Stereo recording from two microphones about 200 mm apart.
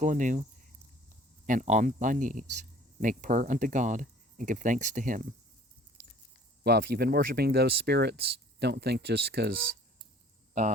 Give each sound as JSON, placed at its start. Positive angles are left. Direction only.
{"t": 0.0, "sound": "speech", "side_deg": -40}
{"t": 1.5, "sound": "speech", "side_deg": -40}
{"t": 6.6, "sound": "speech", "side_deg": -50}